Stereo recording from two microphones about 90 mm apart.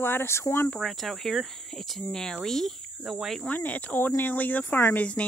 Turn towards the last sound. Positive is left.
turn(degrees=25)  # may be behind; listen again after turning